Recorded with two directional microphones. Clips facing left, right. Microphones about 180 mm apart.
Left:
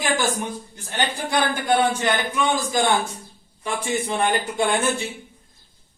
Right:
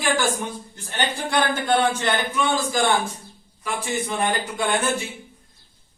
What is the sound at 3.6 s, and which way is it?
Speech, 25° left (ahead or behind).